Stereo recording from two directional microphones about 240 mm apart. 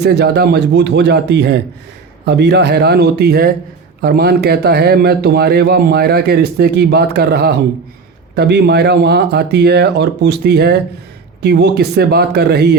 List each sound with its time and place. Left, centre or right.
0.0 s a man's voice: right